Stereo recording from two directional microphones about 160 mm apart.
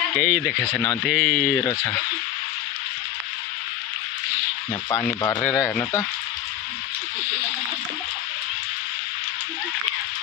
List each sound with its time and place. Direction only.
0.2 s speech: 5° right (ahead or behind)
4.9 s speech: 20° left (ahead or behind)